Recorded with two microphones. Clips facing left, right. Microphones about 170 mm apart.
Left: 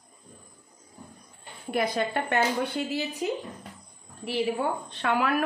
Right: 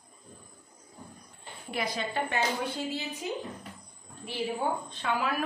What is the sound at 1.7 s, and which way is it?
A woman's voice, 55° left (ahead or behind).